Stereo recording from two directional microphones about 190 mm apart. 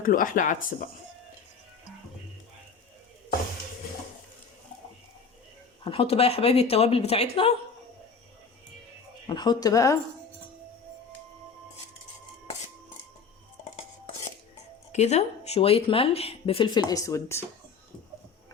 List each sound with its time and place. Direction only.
0.0 s speech: 45° left (ahead or behind)
5.8 s speech: 30° left (ahead or behind)
9.2 s speech: 20° left (ahead or behind)
14.9 s speech: 35° left (ahead or behind); by 17.4 s 15° left (ahead or behind)